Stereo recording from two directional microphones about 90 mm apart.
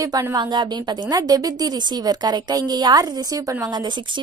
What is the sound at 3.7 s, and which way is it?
Speech, 55° right (ahead or behind).